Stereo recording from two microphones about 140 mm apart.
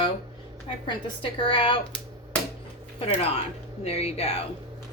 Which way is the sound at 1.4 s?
40° left (ahead or behind).